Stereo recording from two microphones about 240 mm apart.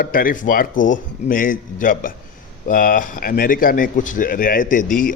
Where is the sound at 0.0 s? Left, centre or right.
Left.